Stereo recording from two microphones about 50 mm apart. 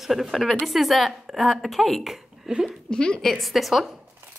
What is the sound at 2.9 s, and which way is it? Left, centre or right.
Speech, centre.